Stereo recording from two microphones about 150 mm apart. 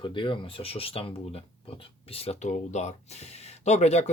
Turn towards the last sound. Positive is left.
turn(degrees=45)  # may be behind; listen again after turning